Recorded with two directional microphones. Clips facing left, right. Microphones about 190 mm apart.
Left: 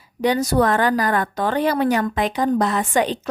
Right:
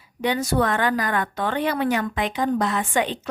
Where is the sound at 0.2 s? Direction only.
40° left (ahead or behind).